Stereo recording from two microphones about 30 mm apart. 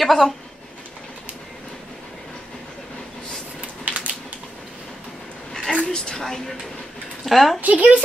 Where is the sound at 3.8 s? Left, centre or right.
Right.